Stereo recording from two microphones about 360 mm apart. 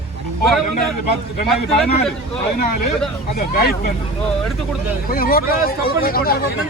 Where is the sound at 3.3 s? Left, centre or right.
Left.